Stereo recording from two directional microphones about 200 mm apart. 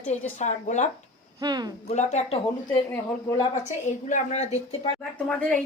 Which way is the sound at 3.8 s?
35° left (ahead or behind).